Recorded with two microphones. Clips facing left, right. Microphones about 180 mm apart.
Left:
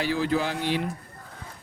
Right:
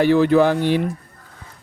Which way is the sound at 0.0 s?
60° right (ahead or behind).